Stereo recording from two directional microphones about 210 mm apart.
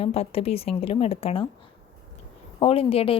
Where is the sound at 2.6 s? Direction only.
25° left (ahead or behind).